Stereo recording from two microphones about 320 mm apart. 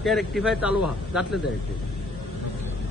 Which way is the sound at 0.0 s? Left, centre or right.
Centre.